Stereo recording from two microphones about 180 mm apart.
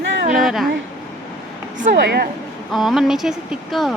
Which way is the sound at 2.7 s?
Centre (ahead or behind).